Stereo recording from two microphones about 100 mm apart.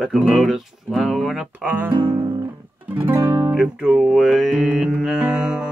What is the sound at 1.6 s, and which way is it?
Music, 15° right (ahead or behind).